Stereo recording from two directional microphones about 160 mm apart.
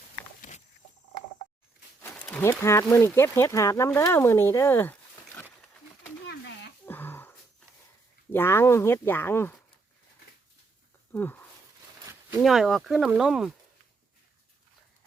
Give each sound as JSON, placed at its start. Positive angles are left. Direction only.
{"t": 2.0, "sound": "wild animals", "side_deg": 10}
{"t": 2.5, "sound": "speech", "side_deg": 15}
{"t": 6.2, "sound": "a sound", "side_deg": 90}
{"t": 6.8, "sound": "a sound", "side_deg": 15}
{"t": 8.3, "sound": "speech", "side_deg": 15}
{"t": 11.1, "sound": "speech", "side_deg": 10}
{"t": 12.4, "sound": "speech", "side_deg": 0}